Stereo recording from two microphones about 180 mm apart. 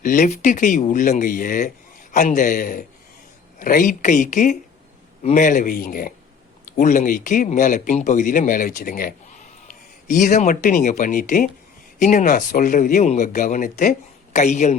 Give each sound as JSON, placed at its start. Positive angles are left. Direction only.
{"t": 0.0, "sound": "a woman's voice", "side_deg": 45}